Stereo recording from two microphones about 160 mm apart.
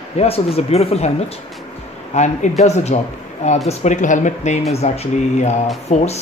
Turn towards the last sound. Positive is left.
turn(degrees=45)  # may be behind; listen again after turning